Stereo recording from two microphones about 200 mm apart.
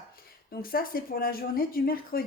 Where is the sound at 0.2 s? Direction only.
50° left (ahead or behind).